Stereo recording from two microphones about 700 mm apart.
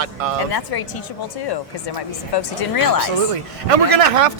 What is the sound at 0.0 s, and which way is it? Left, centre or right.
Speech, right.